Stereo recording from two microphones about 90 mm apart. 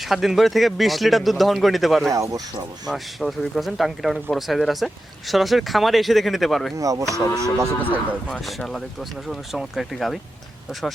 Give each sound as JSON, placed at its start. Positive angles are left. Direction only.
{"t": 0.0, "sound": "speech", "side_deg": -5}
{"t": 2.0, "sound": "speech", "side_deg": -40}
{"t": 2.8, "sound": "speech", "side_deg": 0}
{"t": 6.7, "sound": "speech", "side_deg": -40}
{"t": 8.3, "sound": "speech", "side_deg": 0}